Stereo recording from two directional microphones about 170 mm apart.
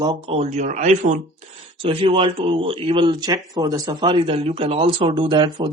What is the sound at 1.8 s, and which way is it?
Speech, 30° right (ahead or behind).